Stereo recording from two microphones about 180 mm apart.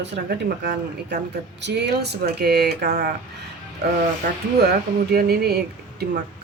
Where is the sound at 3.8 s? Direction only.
65° right (ahead or behind).